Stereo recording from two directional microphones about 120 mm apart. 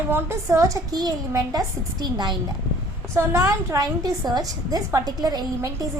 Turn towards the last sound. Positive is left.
turn(degrees=-35)  # may be behind; listen again after turning